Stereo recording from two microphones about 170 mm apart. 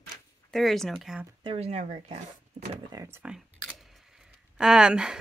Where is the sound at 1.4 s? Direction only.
35° right (ahead or behind).